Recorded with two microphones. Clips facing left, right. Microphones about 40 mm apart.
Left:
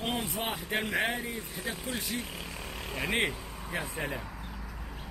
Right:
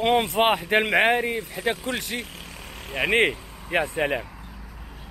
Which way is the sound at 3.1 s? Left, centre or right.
Right.